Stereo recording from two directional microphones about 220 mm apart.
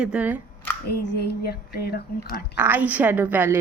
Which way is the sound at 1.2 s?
45° left (ahead or behind).